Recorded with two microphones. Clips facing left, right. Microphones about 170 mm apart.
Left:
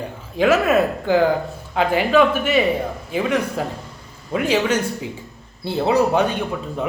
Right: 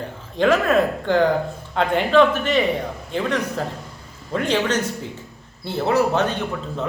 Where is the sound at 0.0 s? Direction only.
5° left (ahead or behind).